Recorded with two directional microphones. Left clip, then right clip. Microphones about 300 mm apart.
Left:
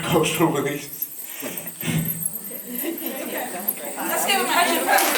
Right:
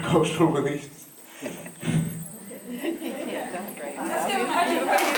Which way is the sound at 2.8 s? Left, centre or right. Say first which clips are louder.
Left 1 dB; centre.